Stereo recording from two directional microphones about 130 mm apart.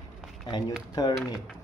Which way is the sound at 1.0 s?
30° left (ahead or behind).